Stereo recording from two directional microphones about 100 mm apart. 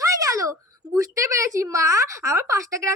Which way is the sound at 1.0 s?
30° right (ahead or behind).